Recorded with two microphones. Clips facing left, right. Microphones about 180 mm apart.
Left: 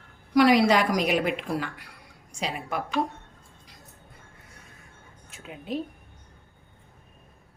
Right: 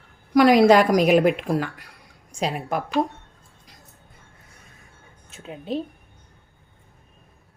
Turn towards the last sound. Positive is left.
turn(degrees=-30)  # may be behind; listen again after turning